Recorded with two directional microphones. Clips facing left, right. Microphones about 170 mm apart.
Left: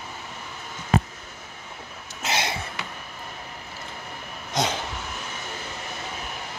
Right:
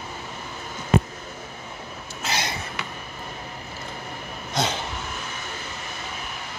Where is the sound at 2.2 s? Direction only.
25° left (ahead or behind).